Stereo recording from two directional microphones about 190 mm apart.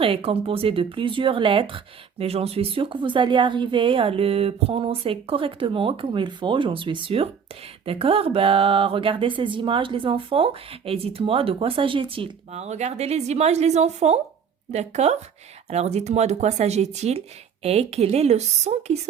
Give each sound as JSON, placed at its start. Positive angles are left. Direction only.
{"t": 0.0, "sound": "speech", "side_deg": -30}